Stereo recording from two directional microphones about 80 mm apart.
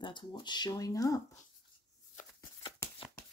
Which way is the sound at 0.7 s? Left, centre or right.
Left.